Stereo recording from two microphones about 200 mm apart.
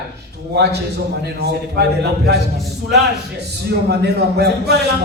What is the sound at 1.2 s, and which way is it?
A man's voice, 55° right (ahead or behind).